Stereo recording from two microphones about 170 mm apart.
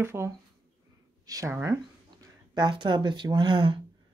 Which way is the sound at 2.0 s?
25° right (ahead or behind).